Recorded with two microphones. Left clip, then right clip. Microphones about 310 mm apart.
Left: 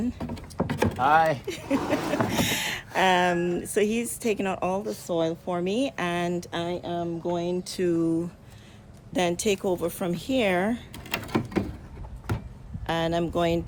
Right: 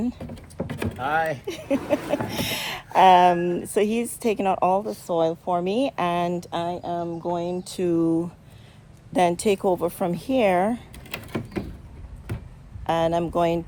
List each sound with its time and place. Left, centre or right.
0.2 s vehicle: centre
1.5 s speech: centre
10.9 s a sound: centre
12.8 s speech: centre